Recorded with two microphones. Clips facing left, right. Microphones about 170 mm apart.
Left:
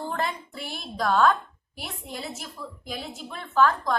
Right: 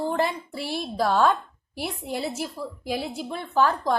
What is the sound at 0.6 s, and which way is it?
Speech, 30° right (ahead or behind).